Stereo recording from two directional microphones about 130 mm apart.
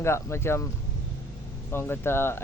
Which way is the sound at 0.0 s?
20° left (ahead or behind).